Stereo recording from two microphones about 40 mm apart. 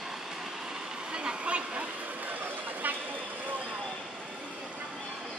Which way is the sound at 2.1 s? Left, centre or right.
Right.